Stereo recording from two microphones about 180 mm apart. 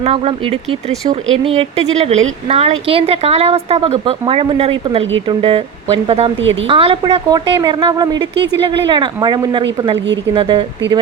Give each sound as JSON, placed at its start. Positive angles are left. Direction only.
{"t": 0.0, "sound": "speech", "side_deg": -35}
{"t": 6.4, "sound": "a woman's voice", "side_deg": -90}
{"t": 6.7, "sound": "a woman's voice", "side_deg": -30}